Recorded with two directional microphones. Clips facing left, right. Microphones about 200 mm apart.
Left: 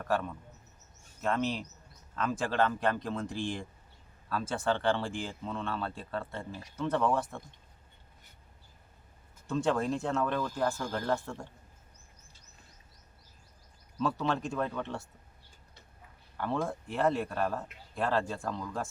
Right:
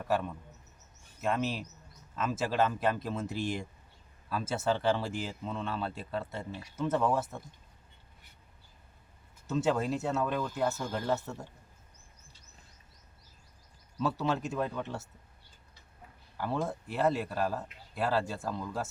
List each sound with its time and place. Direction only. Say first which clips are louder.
0.0 s speech: even; 10° right (ahead or behind)
9.5 s speech: even; 5° right (ahead or behind)
14.0 s speech: even; 5° right (ahead or behind)
16.4 s speech: left 1 dB; 5° right (ahead or behind)